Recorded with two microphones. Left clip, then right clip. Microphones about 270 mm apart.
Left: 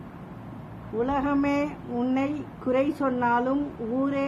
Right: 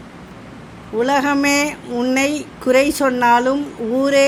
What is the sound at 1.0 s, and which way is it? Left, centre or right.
A woman's voice, centre.